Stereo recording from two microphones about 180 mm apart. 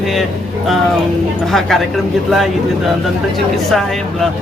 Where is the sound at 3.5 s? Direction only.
Centre (ahead or behind).